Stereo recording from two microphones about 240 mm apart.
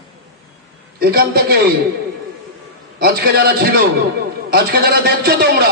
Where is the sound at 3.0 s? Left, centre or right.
Right.